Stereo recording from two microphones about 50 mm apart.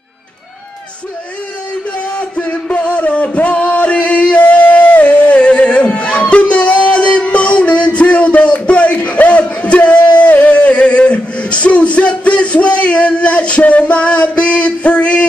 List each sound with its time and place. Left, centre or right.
2.1 s music: left